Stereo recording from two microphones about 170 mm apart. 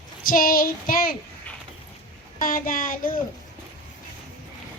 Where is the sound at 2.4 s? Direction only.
55° left (ahead or behind).